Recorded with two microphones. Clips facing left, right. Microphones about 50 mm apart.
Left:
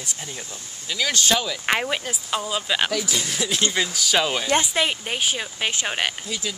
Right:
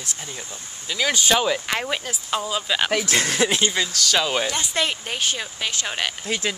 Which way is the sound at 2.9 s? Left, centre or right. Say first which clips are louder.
Right 4 dB; right.